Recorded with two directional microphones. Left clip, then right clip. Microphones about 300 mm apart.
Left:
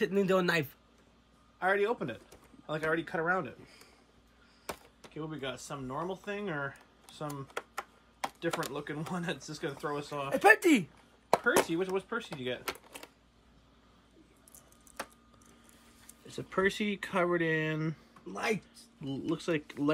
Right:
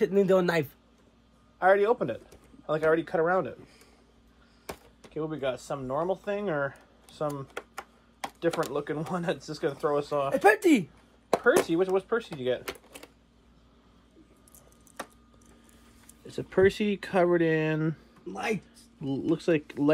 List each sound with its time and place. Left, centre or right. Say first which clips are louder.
0.0 s a man's voice: right 5 dB; centre
4.6 s a sound: right 1 dB; centre
8.4 s speech: right 8 dB; centre
16.3 s speech: right 7 dB; centre